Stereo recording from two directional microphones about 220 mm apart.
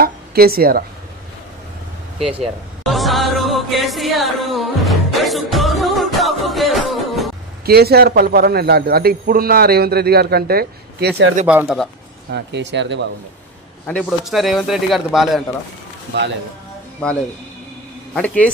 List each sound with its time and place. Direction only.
0.0 s a sound: 45° right (ahead or behind)
2.2 s music: centre (ahead or behind)
7.6 s a man's voice: 45° right (ahead or behind)
11.4 s a man's voice: 5° right (ahead or behind)
12.3 s a man's voice: 50° right (ahead or behind)
13.8 s a man's voice: centre (ahead or behind)
18.1 s a man's voice: 5° left (ahead or behind)